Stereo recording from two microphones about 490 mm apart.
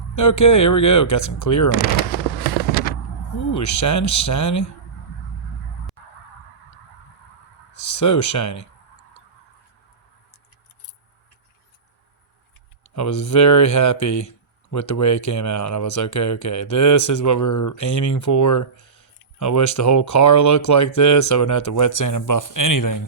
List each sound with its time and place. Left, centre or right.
0.2 s speech: left
3.5 s speech: left
7.7 s speech: left
12.9 s speech: left